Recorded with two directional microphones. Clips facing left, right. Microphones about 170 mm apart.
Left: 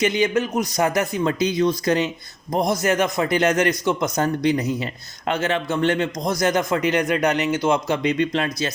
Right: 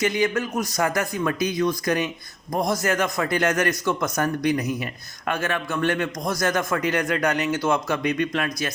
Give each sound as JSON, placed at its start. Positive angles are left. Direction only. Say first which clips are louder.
{"t": 0.0, "sound": "a man's voice", "louder": "left 3 dB", "side_deg": 20}